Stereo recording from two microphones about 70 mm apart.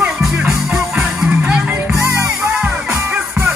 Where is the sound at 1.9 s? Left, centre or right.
Right.